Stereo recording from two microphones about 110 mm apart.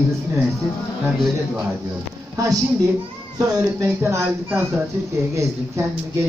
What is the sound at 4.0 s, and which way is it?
A man's voice, 25° right (ahead or behind).